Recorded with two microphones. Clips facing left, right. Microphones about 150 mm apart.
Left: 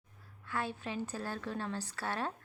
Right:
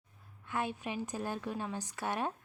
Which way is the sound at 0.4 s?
15° right (ahead or behind).